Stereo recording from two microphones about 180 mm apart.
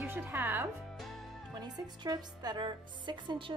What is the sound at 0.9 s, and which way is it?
Music, centre (ahead or behind).